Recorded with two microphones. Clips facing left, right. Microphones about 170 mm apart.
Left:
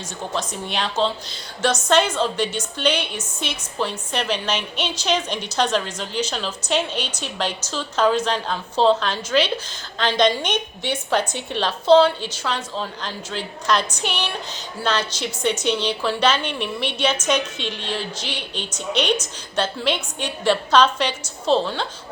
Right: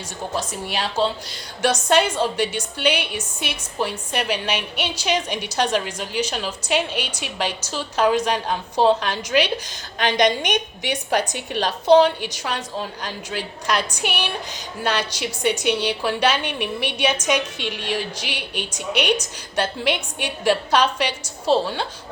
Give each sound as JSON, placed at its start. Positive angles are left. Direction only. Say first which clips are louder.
{"t": 0.3, "sound": "a woman's voice", "louder": "even", "side_deg": -5}